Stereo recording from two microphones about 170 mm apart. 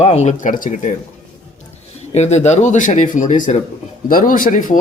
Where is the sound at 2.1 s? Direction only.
40° left (ahead or behind).